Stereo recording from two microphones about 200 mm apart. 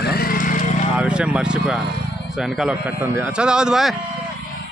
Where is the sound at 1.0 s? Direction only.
5° right (ahead or behind).